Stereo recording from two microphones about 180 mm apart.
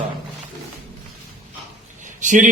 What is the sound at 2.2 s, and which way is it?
Speech, 45° right (ahead or behind).